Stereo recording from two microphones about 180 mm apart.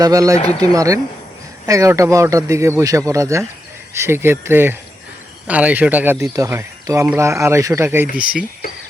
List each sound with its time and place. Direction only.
0.0 s speech: 20° right (ahead or behind)